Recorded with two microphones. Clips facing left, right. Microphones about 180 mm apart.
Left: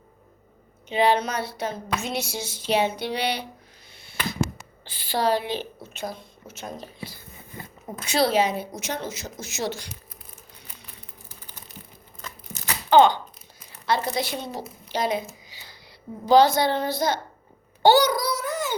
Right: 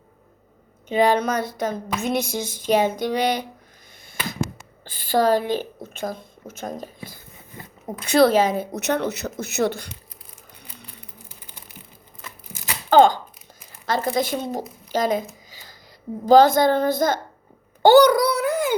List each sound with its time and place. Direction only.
0.9 s a woman's voice: 45° right (ahead or behind)
4.9 s a woman's voice: 50° right (ahead or behind)
12.9 s a woman's voice: 45° right (ahead or behind)
14.9 s a sound: 45° right (ahead or behind)
16.2 s a woman's voice: 45° right (ahead or behind)
17.8 s a sound: 60° right (ahead or behind)